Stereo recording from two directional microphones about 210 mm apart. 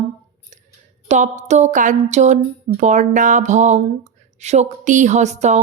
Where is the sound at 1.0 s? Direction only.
35° right (ahead or behind).